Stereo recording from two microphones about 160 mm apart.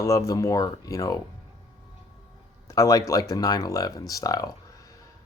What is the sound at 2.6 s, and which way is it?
A man's voice, 20° left (ahead or behind).